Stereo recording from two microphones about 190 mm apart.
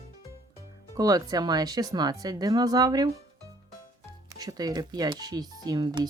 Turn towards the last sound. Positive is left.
turn(degrees=-20)  # may be behind; listen again after turning